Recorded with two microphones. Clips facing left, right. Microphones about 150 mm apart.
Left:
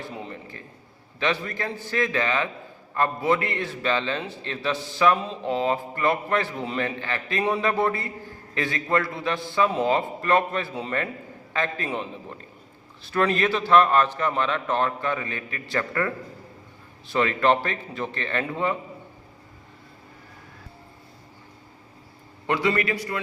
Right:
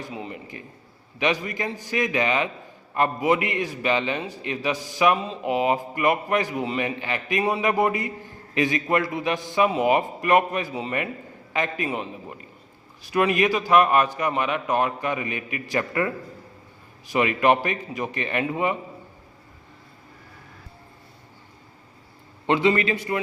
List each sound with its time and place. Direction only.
0.1 s a man's voice: 5° right (ahead or behind)
1.2 s a man's voice: 15° right (ahead or behind)
22.4 s a man's voice: 20° right (ahead or behind)